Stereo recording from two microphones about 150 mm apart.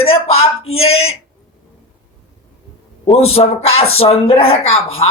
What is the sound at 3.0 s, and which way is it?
A man's voice, 40° left (ahead or behind).